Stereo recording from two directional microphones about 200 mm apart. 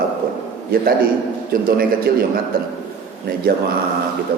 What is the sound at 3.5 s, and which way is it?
Speech, 45° right (ahead or behind).